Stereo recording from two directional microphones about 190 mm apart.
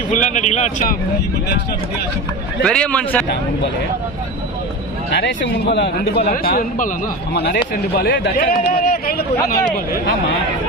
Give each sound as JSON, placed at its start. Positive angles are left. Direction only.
{"t": 0.1, "sound": "speech", "side_deg": 40}
{"t": 2.6, "sound": "a man's voice", "side_deg": 5}
{"t": 5.1, "sound": "a man's voice", "side_deg": 65}
{"t": 7.3, "sound": "a man's voice", "side_deg": 60}